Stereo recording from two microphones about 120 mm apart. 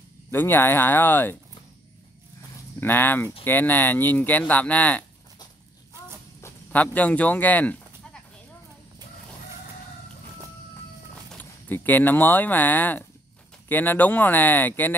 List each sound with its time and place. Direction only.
0.3 s speech: 20° left (ahead or behind)
2.8 s speech: 15° left (ahead or behind)
6.4 s sheep: 15° left (ahead or behind)
11.3 s speech: 15° left (ahead or behind)